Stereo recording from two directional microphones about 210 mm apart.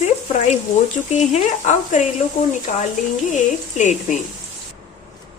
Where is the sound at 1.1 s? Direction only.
30° left (ahead or behind).